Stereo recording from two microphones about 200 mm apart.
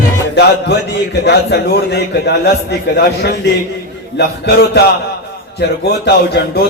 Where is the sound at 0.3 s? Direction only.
55° left (ahead or behind).